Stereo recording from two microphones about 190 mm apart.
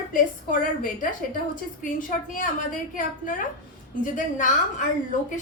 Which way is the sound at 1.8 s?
45° left (ahead or behind).